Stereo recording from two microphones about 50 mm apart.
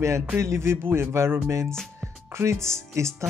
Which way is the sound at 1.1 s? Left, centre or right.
Right.